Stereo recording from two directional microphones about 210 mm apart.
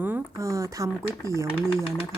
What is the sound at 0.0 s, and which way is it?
Speech, 10° right (ahead or behind).